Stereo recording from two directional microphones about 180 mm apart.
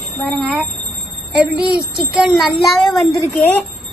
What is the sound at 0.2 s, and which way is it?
Speech, centre (ahead or behind).